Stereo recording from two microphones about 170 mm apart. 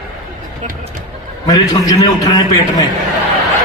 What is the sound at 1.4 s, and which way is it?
A man's voice, 20° left (ahead or behind).